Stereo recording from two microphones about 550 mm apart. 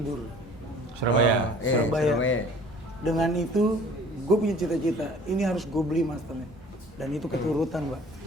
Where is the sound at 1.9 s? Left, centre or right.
Centre.